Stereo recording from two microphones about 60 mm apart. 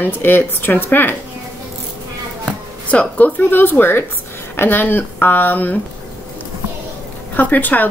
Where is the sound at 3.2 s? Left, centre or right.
Left.